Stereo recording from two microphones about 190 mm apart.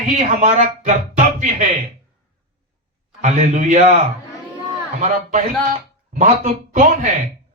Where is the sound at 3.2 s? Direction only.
40° right (ahead or behind).